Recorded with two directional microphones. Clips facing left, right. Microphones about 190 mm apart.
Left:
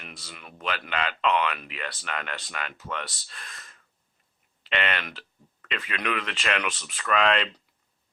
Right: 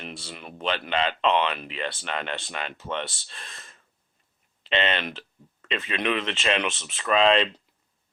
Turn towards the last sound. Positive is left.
turn(degrees=-25)  # may be behind; listen again after turning